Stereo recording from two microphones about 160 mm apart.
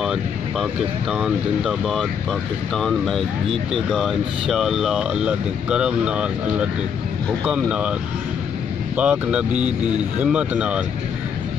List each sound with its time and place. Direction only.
0.0 s speech: 5° right (ahead or behind)
8.9 s speech: 10° right (ahead or behind)